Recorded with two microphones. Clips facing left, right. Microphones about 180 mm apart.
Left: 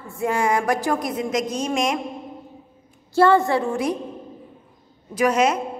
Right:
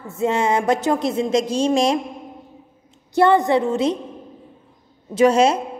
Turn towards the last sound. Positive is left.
turn(degrees=-30)  # may be behind; listen again after turning